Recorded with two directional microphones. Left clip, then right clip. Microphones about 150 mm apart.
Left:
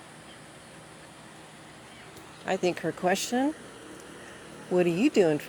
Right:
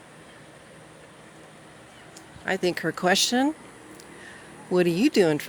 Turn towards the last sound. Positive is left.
turn(degrees=-40)  # may be behind; listen again after turning